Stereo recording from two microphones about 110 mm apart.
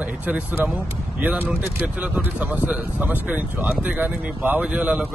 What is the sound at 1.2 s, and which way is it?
Speech, 15° right (ahead or behind).